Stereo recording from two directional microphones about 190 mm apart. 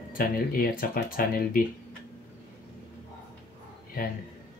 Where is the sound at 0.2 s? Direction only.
50° left (ahead or behind).